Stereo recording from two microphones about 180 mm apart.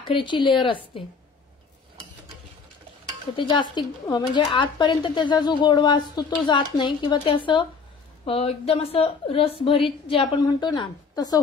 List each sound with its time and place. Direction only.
0.1 s a woman's voice: 25° left (ahead or behind)
3.3 s a woman's voice: 25° left (ahead or behind)